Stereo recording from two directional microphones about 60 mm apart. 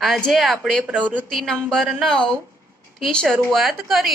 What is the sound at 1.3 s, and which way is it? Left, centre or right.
A woman's voice, centre.